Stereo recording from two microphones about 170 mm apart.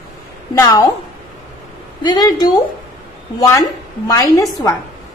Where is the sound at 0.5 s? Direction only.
20° left (ahead or behind).